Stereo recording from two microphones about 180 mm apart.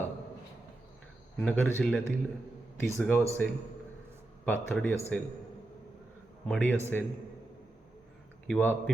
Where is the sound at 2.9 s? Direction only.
10° left (ahead or behind).